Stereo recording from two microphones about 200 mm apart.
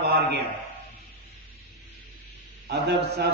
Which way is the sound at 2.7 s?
55° right (ahead or behind).